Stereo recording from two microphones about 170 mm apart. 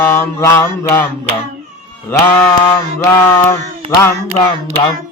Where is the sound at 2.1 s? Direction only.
10° left (ahead or behind).